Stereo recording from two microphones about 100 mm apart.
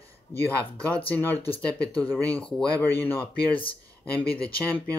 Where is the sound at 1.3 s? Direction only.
75° left (ahead or behind).